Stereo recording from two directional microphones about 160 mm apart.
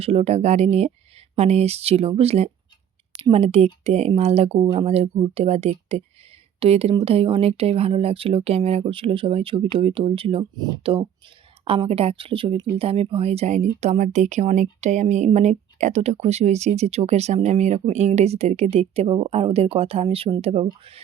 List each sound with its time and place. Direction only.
0.0 s speech: 40° right (ahead or behind)